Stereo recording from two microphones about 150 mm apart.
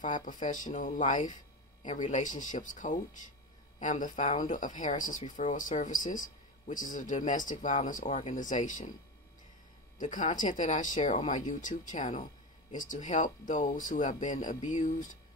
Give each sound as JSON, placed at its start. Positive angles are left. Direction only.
{"t": 0.0, "sound": "speech", "side_deg": 60}
{"t": 9.9, "sound": "speech", "side_deg": 55}